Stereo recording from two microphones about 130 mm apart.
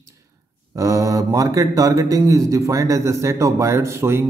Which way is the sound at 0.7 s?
25° right (ahead or behind).